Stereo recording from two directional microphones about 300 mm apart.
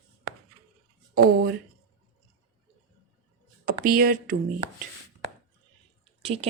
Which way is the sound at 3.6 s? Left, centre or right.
Right.